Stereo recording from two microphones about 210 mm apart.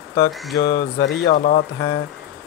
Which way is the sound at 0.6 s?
45° left (ahead or behind).